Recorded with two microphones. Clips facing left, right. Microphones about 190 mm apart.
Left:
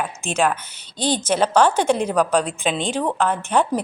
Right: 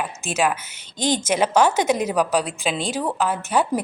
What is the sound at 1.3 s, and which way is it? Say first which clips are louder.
A woman's voice: left 2 dB; 10° right (ahead or behind).